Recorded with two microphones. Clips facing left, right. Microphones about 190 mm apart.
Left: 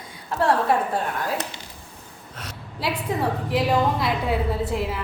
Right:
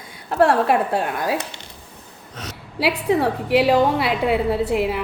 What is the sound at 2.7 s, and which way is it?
A woman's voice, 75° right (ahead or behind).